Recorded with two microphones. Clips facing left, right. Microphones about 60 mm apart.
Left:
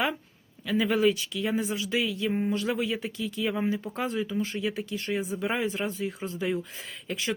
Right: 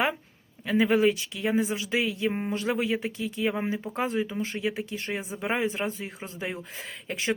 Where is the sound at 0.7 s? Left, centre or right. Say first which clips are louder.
Right 2 dB; right.